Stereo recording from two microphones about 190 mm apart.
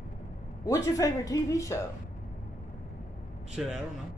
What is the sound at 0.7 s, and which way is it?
A woman's voice, 15° left (ahead or behind).